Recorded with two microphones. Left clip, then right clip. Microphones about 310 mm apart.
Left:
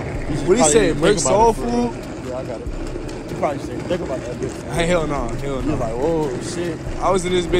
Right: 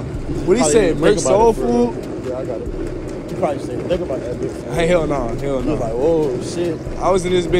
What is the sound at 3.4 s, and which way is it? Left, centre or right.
Speech, left.